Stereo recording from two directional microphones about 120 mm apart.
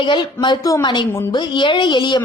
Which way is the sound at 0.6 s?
30° left (ahead or behind).